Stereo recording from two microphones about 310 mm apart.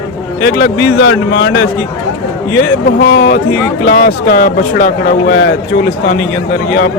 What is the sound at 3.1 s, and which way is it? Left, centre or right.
Speech, left.